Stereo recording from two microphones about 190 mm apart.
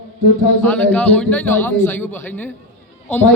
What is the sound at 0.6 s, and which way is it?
A man's voice, 5° left (ahead or behind).